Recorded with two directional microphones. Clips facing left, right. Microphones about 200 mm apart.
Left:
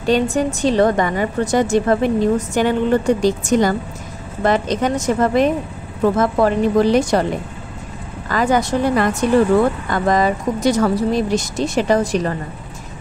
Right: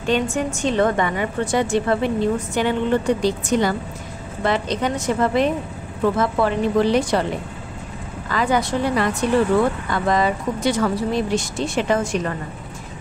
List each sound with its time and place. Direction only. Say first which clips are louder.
0.0 s a woman's voice: left 4 dB; 35° left (ahead or behind)
8.3 s a woman's voice: left 3 dB; 45° left (ahead or behind)